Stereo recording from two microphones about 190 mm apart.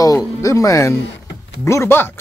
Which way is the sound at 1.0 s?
70° left (ahead or behind).